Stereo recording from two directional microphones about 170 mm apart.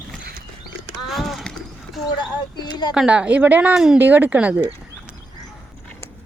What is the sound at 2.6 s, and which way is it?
Speech, 25° left (ahead or behind).